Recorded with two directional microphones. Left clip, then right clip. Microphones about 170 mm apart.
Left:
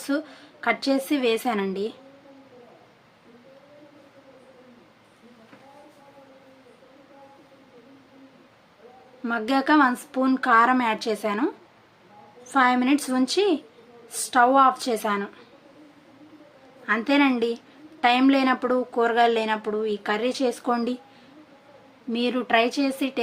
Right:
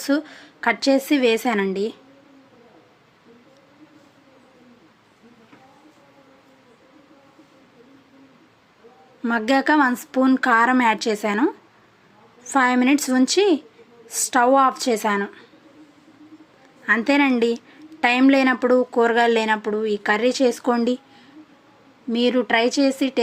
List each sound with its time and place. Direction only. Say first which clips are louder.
0.0 s speech: right 5 dB; 30° right (ahead or behind)
9.2 s speech: right 4 dB; 30° right (ahead or behind)
16.8 s speech: right 3 dB; 30° right (ahead or behind)
22.1 s speech: right 3 dB; 25° right (ahead or behind)